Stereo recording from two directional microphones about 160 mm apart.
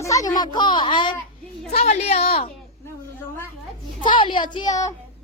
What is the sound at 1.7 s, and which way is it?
Speech, 40° left (ahead or behind).